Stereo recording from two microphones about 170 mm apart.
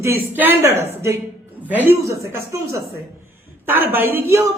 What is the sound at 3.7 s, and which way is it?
Speech, 15° right (ahead or behind).